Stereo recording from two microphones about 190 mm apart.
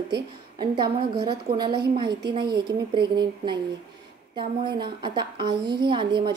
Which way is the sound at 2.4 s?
60° right (ahead or behind).